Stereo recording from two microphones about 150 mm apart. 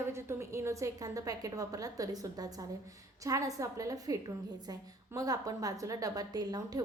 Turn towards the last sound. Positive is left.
turn(degrees=-25)  # may be behind; listen again after turning